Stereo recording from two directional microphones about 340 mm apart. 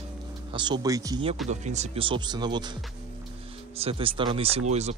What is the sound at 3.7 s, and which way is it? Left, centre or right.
Speech, centre.